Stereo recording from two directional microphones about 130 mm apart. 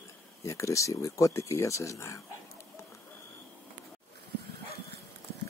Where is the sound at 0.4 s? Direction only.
25° left (ahead or behind).